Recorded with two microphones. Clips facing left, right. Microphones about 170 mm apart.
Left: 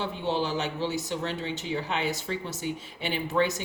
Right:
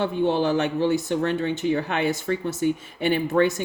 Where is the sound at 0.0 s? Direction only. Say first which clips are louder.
Right 7 dB; 55° right (ahead or behind).